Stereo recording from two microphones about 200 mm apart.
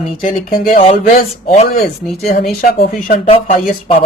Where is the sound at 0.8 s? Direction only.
30° left (ahead or behind).